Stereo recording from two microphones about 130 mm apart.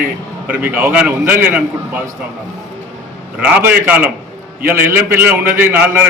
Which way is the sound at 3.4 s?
10° right (ahead or behind).